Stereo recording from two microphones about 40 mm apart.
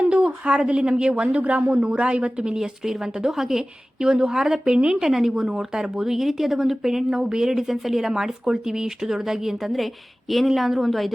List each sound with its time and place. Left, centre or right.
0.0 s speech: right
1.8 s a woman's voice: right
2.6 s speech: centre
4.0 s speech: centre
5.0 s speech: centre
7.5 s speech: centre
9.7 s a woman's voice: centre